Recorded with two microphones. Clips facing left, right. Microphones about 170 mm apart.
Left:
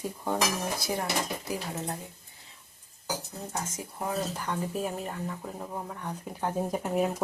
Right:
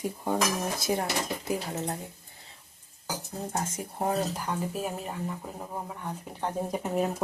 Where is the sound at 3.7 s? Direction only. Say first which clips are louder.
Right 6 dB; 40° right (ahead or behind).